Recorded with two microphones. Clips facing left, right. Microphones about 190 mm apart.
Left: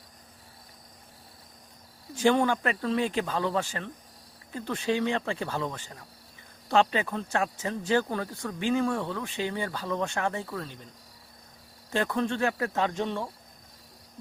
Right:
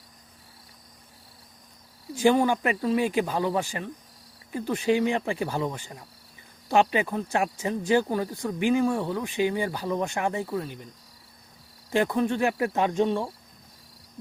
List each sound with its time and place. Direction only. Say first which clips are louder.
2.1 s speech: right 2 dB; 10° right (ahead or behind)
11.9 s speech: right 4 dB; 10° right (ahead or behind)